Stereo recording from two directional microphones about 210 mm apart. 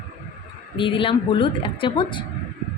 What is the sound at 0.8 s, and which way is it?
A woman's voice, 25° left (ahead or behind).